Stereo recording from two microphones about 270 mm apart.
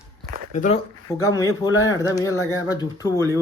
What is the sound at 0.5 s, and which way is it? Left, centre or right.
Speech, left.